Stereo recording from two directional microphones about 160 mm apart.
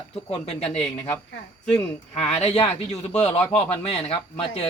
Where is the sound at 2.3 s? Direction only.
40° left (ahead or behind).